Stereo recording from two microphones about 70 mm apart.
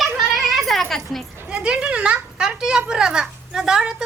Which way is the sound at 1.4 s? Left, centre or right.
Centre.